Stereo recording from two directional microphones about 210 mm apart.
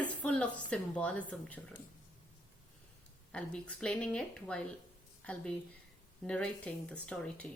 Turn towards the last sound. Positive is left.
turn(degrees=5)  # may be behind; listen again after turning